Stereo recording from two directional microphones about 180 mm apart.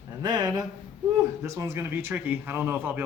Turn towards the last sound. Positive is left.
turn(degrees=-10)  # may be behind; listen again after turning